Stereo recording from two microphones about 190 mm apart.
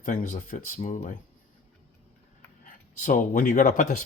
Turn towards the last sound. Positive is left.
turn(degrees=40)  # may be behind; listen again after turning